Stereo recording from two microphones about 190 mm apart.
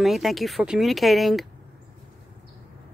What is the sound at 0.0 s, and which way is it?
Speech, centre (ahead or behind).